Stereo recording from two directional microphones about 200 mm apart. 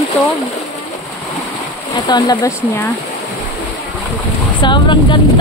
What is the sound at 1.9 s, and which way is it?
Speech, 20° left (ahead or behind).